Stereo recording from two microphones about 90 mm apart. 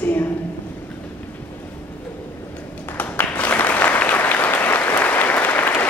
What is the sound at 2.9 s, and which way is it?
Applause, 20° left (ahead or behind).